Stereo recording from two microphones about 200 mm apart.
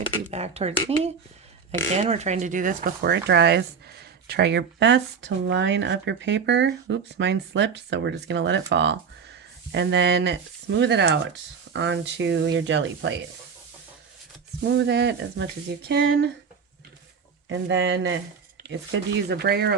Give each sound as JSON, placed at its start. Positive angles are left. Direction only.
{"t": 0.3, "sound": "speech", "side_deg": -30}
{"t": 14.6, "sound": "speech", "side_deg": -60}
{"t": 17.5, "sound": "speech", "side_deg": -65}